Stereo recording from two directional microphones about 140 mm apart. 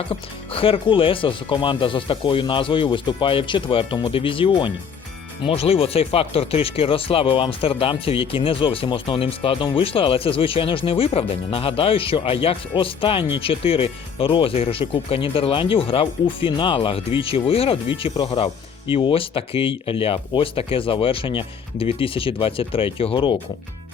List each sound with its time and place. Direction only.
0.1 s speech: 40° left (ahead or behind)